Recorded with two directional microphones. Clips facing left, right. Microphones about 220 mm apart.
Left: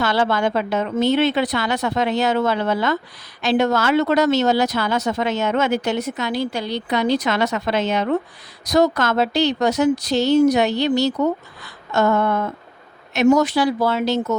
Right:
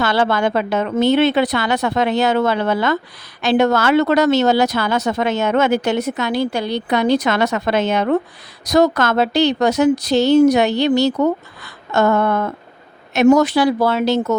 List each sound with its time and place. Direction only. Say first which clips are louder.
0.0 s a woman's voice: right 2 dB; 70° right (ahead or behind); by 8.2 s 55° right (ahead or behind)
8.7 s a woman's voice: right 3 dB; 70° right (ahead or behind)